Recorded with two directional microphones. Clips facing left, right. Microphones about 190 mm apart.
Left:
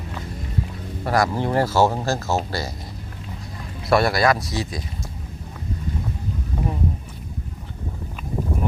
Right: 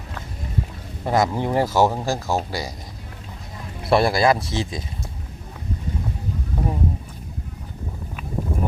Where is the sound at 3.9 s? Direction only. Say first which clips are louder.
Right 1 dB; 30° right (ahead or behind).